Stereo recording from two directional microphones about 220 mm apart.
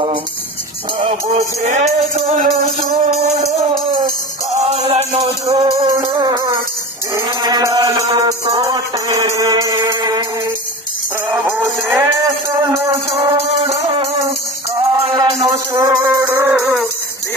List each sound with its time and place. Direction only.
0.9 s music: 30° right (ahead or behind)
7.2 s chant: 15° right (ahead or behind)
11.2 s music: 15° right (ahead or behind)
14.8 s chant: 25° right (ahead or behind)
16.5 s a sound: centre (ahead or behind)